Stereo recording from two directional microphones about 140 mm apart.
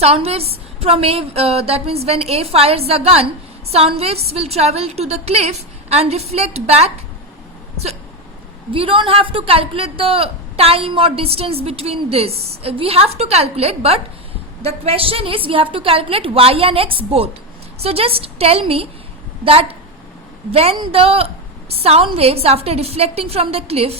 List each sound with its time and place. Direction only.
0.0 s a woman's voice: 45° right (ahead or behind)
8.7 s a woman's voice: 40° right (ahead or behind)